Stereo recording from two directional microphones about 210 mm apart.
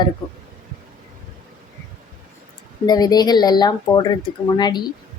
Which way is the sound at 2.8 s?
20° left (ahead or behind).